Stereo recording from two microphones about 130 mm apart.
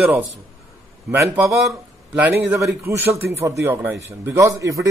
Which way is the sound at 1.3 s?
Centre (ahead or behind).